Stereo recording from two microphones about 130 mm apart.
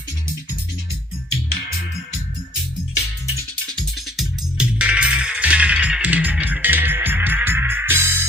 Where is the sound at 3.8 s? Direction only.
Centre (ahead or behind).